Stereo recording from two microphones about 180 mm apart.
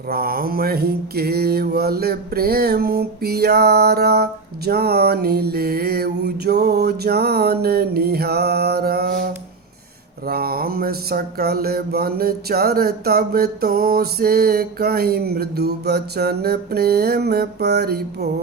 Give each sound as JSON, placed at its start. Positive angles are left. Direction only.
{"t": 0.1, "sound": "mantra", "side_deg": -55}